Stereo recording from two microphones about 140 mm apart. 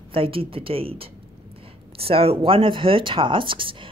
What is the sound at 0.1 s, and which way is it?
A woman's voice, 40° right (ahead or behind).